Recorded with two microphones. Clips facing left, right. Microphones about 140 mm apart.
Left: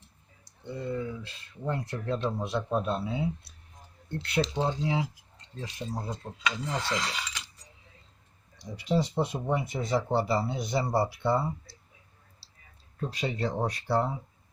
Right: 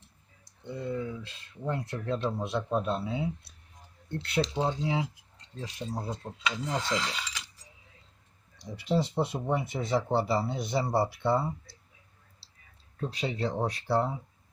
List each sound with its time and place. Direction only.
0.7 s speech: centre (ahead or behind)
8.7 s speech: 5° left (ahead or behind)
13.0 s speech: centre (ahead or behind)